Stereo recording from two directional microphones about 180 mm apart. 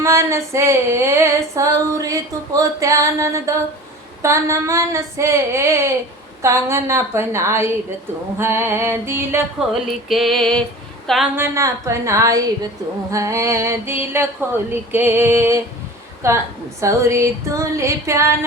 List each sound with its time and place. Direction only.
0.0 s female singing: 15° right (ahead or behind)
10.1 s music: centre (ahead or behind)
11.0 s a woman's voice: centre (ahead or behind)
11.3 s female singing: 15° right (ahead or behind)